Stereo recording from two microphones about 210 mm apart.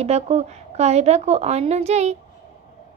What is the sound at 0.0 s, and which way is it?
A woman's voice, 30° right (ahead or behind).